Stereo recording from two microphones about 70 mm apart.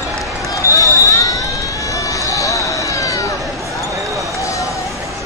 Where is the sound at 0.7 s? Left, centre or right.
Left.